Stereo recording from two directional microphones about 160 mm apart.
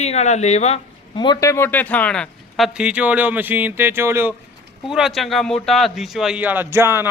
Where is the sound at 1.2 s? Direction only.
25° left (ahead or behind); by 4.3 s 15° right (ahead or behind).